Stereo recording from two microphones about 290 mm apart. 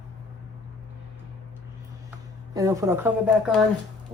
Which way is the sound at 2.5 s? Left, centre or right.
Centre.